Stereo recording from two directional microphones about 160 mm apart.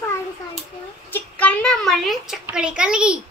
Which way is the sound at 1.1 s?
10° left (ahead or behind).